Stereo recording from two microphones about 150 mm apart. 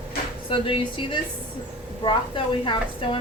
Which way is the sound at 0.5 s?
35° left (ahead or behind).